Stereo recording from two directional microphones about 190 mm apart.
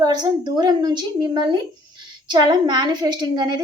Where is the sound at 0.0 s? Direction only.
20° right (ahead or behind).